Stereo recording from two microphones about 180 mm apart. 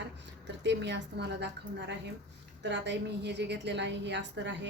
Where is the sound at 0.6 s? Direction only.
75° right (ahead or behind).